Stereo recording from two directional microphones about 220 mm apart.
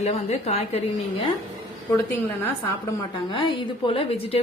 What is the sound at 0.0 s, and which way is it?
A woman's voice, 30° left (ahead or behind).